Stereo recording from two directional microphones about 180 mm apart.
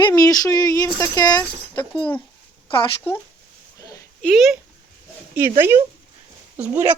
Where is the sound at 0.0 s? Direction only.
20° left (ahead or behind).